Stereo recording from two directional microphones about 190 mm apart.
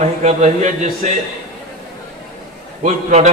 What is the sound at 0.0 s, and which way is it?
A man's voice, 35° right (ahead or behind).